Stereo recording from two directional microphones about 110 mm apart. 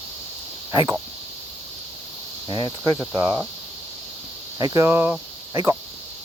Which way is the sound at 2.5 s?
45° right (ahead or behind).